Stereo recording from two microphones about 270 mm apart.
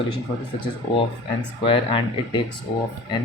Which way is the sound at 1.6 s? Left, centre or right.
Centre.